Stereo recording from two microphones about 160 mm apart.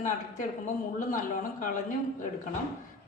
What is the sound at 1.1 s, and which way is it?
Speech, 55° left (ahead or behind).